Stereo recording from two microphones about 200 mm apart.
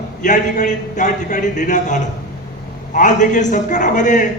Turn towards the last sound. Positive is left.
turn(degrees=40)  # may be behind; listen again after turning